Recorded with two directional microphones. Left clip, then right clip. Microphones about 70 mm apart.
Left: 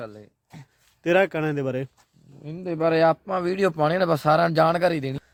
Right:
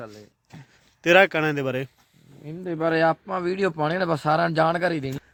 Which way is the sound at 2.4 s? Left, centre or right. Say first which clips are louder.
Even; left.